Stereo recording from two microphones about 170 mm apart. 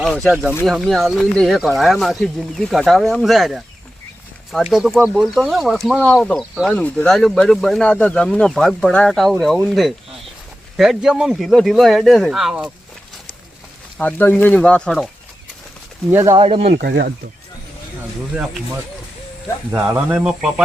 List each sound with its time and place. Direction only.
0.0 s speech: centre (ahead or behind)
14.0 s speech: 10° left (ahead or behind)
16.1 s speech: 20° right (ahead or behind)
16.4 s speech: 35° right (ahead or behind)
16.6 s speech: 70° right (ahead or behind)
19.7 s speech: 10° right (ahead or behind)